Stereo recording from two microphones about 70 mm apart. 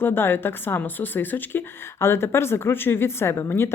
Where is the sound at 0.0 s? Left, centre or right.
Left.